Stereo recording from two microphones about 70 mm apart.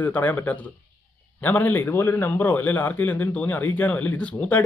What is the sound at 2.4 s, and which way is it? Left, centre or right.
Speech, left.